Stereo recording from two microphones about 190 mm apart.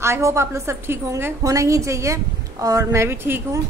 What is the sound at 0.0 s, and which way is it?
A woman's voice, 15° right (ahead or behind).